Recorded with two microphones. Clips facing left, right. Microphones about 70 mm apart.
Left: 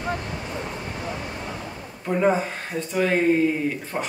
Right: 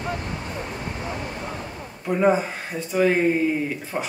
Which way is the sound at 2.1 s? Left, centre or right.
Centre.